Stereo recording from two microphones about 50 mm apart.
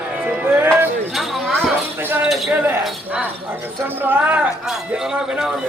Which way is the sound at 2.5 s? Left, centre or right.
Right.